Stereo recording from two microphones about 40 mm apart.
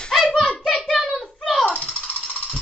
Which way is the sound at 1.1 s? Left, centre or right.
Centre.